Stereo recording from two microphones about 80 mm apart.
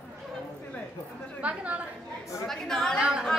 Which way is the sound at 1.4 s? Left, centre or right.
Centre.